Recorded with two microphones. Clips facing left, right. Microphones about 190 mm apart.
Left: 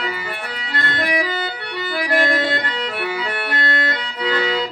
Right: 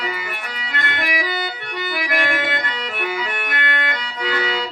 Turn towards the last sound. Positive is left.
turn(degrees=35)  # may be behind; listen again after turning